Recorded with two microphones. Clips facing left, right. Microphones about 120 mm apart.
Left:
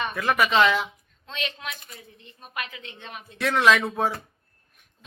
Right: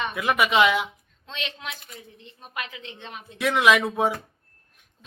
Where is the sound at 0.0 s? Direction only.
15° right (ahead or behind).